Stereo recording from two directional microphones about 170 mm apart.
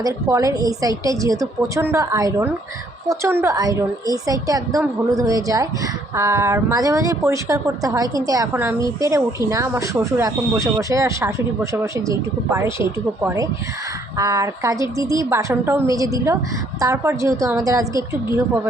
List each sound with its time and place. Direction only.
0.0 s a woman's voice: 20° right (ahead or behind)